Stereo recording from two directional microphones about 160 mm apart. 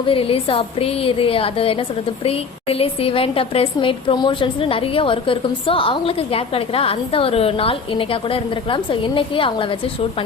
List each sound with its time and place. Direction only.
0.1 s a woman's voice: 35° left (ahead or behind)